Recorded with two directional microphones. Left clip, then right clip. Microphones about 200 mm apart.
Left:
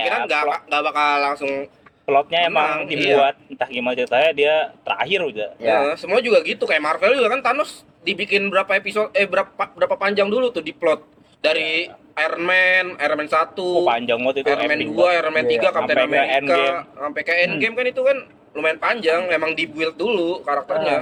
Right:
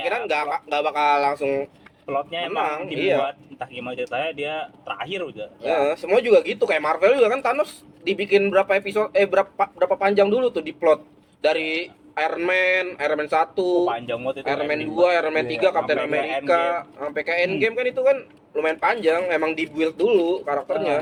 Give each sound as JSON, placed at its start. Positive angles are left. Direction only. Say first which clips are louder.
{"t": 0.3, "sound": "speech", "louder": "left 3 dB", "side_deg": -50}
{"t": 2.0, "sound": "speech", "louder": "left 9 dB", "side_deg": 10}
{"t": 2.6, "sound": "speech", "louder": "left 5 dB", "side_deg": -50}
{"t": 3.2, "sound": "speech", "louder": "left 8 dB", "side_deg": 10}
{"t": 5.7, "sound": "speech", "louder": "even", "side_deg": -45}
{"t": 13.8, "sound": "speech", "louder": "left 6 dB", "side_deg": 10}
{"t": 15.0, "sound": "speech", "louder": "left 2 dB", "side_deg": -45}